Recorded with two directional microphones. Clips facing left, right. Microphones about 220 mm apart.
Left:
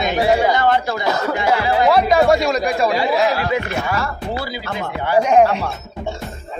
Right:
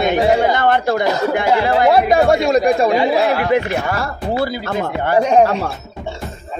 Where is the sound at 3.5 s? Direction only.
50° right (ahead or behind).